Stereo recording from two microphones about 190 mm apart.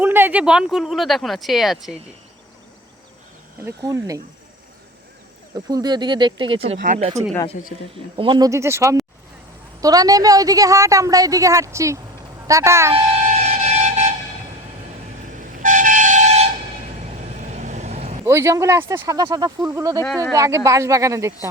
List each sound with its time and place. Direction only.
0.0 s speech: 10° right (ahead or behind)
3.6 s a woman's voice: 15° right (ahead or behind)
5.6 s speech: 20° right (ahead or behind); by 7.3 s 35° right (ahead or behind)
8.1 s a woman's voice: 25° right (ahead or behind)
12.9 s train: 35° right (ahead or behind)
15.3 s train: 45° right (ahead or behind)
18.3 s a woman's voice: 15° right (ahead or behind)
20.1 s speech: 10° left (ahead or behind)
20.3 s a woman's voice: 15° right (ahead or behind)